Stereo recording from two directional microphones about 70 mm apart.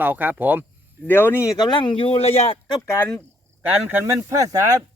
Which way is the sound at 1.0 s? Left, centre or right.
Left.